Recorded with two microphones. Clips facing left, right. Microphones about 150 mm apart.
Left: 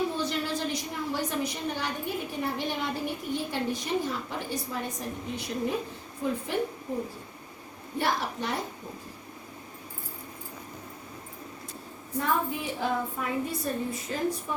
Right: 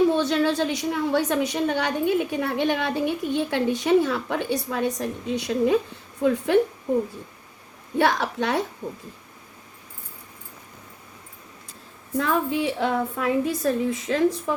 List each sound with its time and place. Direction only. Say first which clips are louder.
0.1 s a woman's voice: right 9 dB; 85° right
7.9 s a woman's voice: right 7 dB; 80° right
12.1 s a woman's voice: right 5 dB; 90° right